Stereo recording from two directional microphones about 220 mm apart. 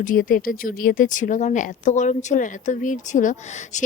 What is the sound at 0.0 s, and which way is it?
Speech, 40° left (ahead or behind).